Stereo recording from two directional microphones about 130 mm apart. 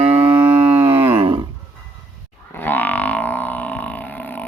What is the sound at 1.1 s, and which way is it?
Livestock, 45° right (ahead or behind).